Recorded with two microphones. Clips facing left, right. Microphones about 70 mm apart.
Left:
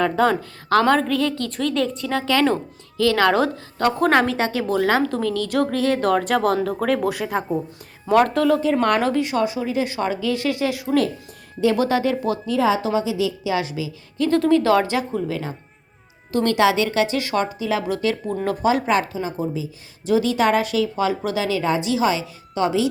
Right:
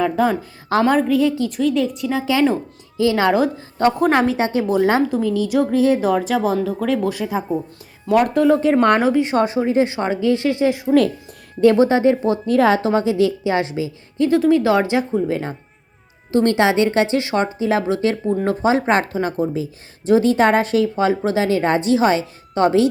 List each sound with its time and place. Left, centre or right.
0.0 s a woman's voice: centre
8.3 s a woman's voice: right
8.6 s speech: right
9.0 s a woman's voice: centre
9.2 s a woman's voice: right
12.5 s speech: right
14.3 s a woman's voice: centre
15.3 s a woman's voice: right
18.9 s speech: right